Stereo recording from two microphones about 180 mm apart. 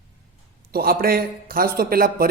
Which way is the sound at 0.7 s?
55° right (ahead or behind).